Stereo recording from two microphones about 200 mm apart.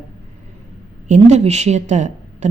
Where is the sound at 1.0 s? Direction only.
35° right (ahead or behind).